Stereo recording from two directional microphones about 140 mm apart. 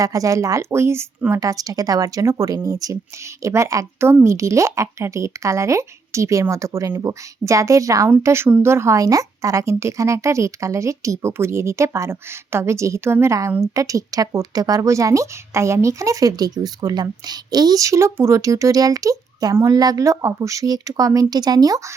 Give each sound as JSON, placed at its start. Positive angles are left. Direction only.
{"t": 0.0, "sound": "speech", "side_deg": -25}